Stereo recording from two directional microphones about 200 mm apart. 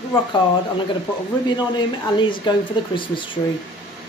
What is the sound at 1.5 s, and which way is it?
Speech, 25° left (ahead or behind).